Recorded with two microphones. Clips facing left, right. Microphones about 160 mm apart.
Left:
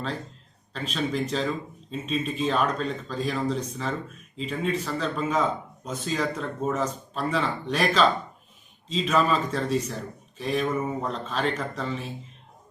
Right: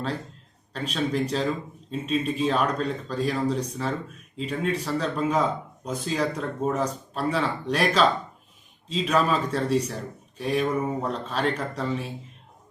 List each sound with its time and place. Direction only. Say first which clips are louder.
0.9 s speech: right 2 dB; 10° right (ahead or behind)